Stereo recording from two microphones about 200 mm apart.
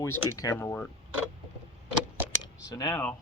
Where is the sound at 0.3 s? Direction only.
15° left (ahead or behind).